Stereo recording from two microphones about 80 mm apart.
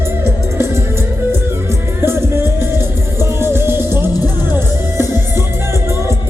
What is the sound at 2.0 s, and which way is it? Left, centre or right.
Music, right.